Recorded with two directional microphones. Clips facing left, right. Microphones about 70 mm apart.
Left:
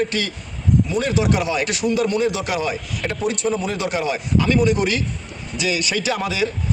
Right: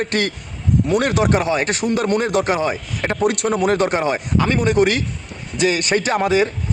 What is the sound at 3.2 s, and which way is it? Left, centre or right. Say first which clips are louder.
Speech: right 5 dB; right.